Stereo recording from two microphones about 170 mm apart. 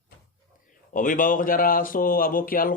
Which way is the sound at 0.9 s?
50° left (ahead or behind).